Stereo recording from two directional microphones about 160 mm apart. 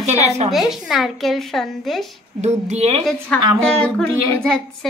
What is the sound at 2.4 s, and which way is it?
Speech, 45° right (ahead or behind).